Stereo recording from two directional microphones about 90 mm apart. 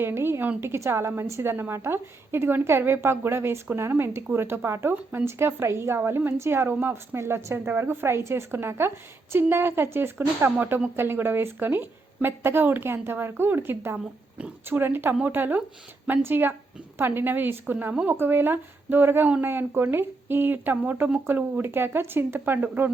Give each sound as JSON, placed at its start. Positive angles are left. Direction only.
{"t": 0.0, "sound": "a woman's voice", "side_deg": -25}